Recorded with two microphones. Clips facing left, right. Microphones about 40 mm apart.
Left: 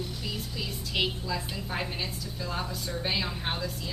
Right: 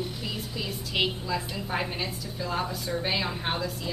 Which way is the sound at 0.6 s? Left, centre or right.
Centre.